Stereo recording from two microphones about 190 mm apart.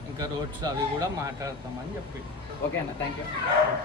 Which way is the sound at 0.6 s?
20° right (ahead or behind).